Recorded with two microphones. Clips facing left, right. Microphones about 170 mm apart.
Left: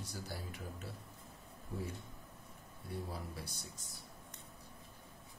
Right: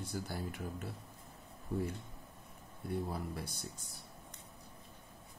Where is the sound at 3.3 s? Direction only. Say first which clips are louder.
Right 5 dB; 55° right (ahead or behind).